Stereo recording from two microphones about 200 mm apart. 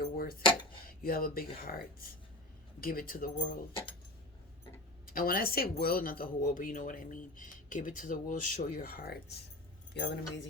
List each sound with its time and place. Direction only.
0.2 s dishes: 50° left (ahead or behind)
1.0 s speech: 45° left (ahead or behind)
5.1 s speech: 45° left (ahead or behind)
9.9 s speech: 60° left (ahead or behind)